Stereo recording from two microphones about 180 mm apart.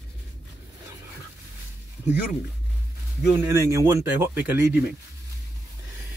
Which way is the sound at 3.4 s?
15° right (ahead or behind).